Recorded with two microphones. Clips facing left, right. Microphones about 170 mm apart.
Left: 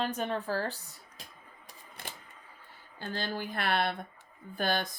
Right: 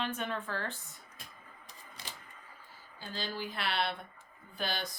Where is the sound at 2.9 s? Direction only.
55° left (ahead or behind).